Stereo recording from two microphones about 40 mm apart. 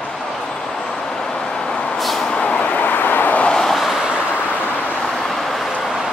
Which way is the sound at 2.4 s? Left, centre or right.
Left.